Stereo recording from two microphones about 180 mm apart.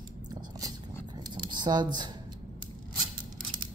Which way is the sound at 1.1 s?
25° right (ahead or behind).